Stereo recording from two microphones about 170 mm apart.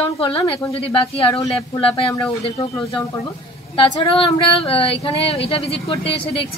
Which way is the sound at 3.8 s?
30° left (ahead or behind).